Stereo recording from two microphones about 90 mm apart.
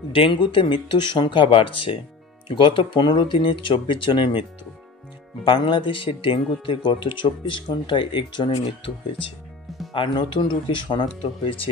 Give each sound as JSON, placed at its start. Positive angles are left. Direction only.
{"t": 0.1, "sound": "speech", "side_deg": 70}
{"t": 9.9, "sound": "speech", "side_deg": 65}